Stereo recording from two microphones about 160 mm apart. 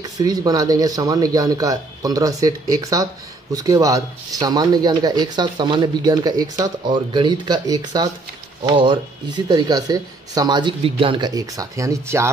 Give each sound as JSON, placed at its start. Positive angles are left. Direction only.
{"t": 0.0, "sound": "speech", "side_deg": -25}